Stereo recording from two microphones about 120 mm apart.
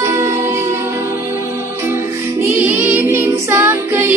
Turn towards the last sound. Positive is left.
turn(degrees=-20)  # may be behind; listen again after turning